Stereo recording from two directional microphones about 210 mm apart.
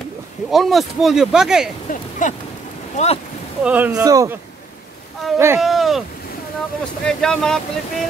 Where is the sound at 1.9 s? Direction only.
35° left (ahead or behind).